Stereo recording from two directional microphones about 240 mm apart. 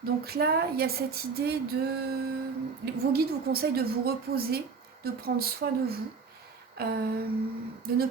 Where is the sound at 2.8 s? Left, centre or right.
Right.